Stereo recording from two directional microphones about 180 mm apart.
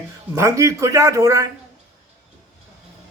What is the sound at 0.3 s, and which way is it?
A man's voice, 15° right (ahead or behind).